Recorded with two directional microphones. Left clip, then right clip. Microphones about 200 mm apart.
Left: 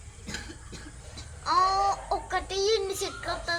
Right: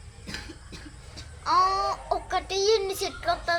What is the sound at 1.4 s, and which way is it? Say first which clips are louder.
A child's voice: right 1 dB; 35° right (ahead or behind).